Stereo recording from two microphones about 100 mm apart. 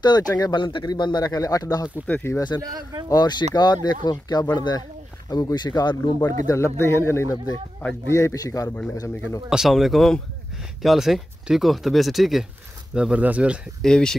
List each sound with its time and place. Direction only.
0.3 s speech: 45° left (ahead or behind)
2.0 s speech: 15° left (ahead or behind)
2.6 s speech: 40° right (ahead or behind)
3.1 s a man's voice: 45° left (ahead or behind)
9.5 s speech: 5° right (ahead or behind)
13.8 s speech: 5° left (ahead or behind)